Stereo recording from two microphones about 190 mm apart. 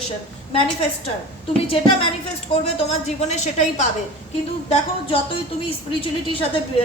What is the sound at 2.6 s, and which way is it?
A woman's voice, 35° left (ahead or behind).